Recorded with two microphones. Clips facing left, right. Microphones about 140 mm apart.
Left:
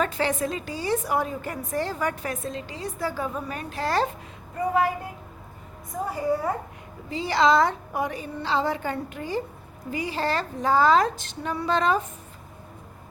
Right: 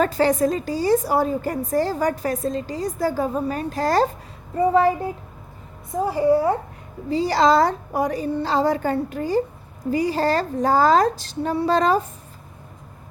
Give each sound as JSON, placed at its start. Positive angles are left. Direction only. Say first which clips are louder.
{"t": 0.0, "sound": "a woman's voice", "louder": "right 7 dB", "side_deg": -40}